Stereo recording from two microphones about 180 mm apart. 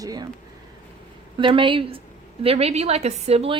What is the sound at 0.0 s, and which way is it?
Speech, 20° right (ahead or behind).